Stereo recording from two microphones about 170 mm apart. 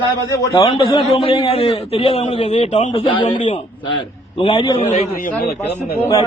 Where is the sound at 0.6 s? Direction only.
30° left (ahead or behind).